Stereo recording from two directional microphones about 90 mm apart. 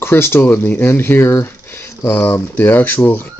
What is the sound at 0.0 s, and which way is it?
Speech, 25° left (ahead or behind).